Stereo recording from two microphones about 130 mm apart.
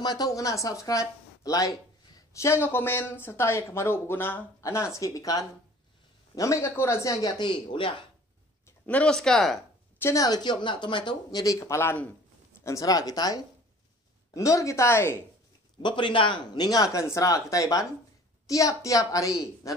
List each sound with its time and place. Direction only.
0.0 s speech: 30° left (ahead or behind)
8.6 s speech: 10° left (ahead or behind)
9.9 s speech: 20° left (ahead or behind)
15.8 s speech: 40° left (ahead or behind)